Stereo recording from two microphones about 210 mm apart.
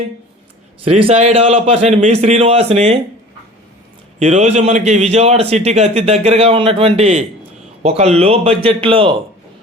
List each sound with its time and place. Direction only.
1.0 s a man's voice: 30° right (ahead or behind)
4.2 s a man's voice: 30° right (ahead or behind)